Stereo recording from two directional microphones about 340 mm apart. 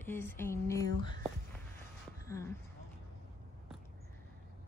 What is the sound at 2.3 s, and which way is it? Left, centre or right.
Speech, centre.